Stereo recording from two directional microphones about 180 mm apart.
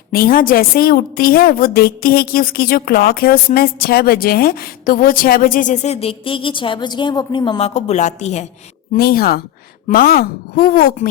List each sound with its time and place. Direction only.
0.1 s a woman's voice: 55° left (ahead or behind)
9.0 s a woman's voice: 55° left (ahead or behind)